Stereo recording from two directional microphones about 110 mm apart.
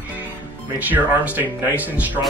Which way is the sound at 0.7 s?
15° right (ahead or behind).